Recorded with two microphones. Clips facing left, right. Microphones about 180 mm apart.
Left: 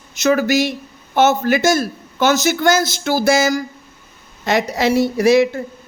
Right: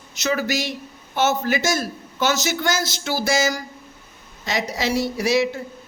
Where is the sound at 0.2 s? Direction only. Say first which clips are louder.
Left 8 dB; 50° left (ahead or behind).